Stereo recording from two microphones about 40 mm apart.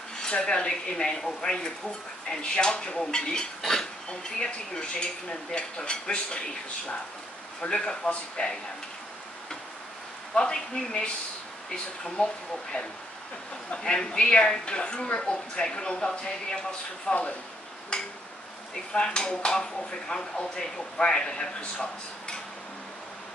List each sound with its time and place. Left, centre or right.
0.2 s dishes: left
4.4 s dishes: left
7.6 s dishes: centre
10.3 s dishes: centre
13.7 s dishes: left